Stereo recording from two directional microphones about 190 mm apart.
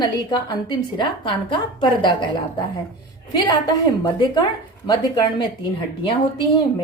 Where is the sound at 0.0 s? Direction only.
25° left (ahead or behind).